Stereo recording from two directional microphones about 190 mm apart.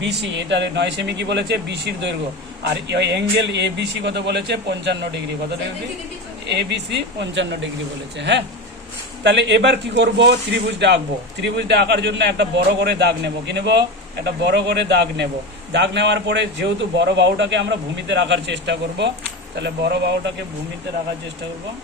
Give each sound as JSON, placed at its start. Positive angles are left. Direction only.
{"t": 0.0, "sound": "a man's voice", "side_deg": -65}
{"t": 6.5, "sound": "a man's voice", "side_deg": -65}